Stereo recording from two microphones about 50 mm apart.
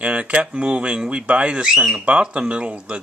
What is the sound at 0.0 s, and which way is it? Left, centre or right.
Speech, right.